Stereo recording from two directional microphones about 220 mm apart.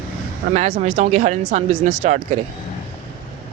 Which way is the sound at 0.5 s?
30° right (ahead or behind).